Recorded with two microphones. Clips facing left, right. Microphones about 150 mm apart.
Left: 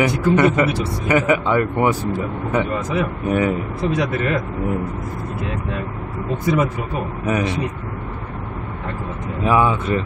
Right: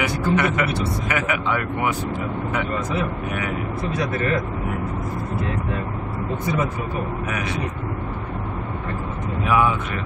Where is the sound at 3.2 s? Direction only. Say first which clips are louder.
Left 9 dB; 35° left (ahead or behind).